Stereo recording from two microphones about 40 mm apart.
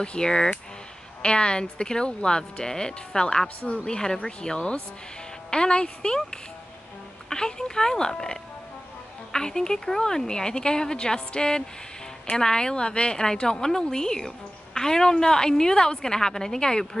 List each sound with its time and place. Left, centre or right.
0.0 s a woman's voice: left